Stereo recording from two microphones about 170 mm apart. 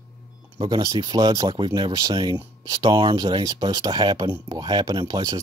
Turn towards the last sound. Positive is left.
turn(degrees=-25)  # may be behind; listen again after turning